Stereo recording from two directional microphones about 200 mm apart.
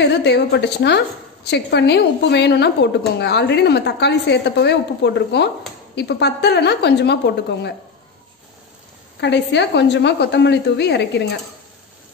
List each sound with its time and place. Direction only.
0.0 s a woman's voice: 60° left (ahead or behind)
9.2 s a woman's voice: 60° left (ahead or behind)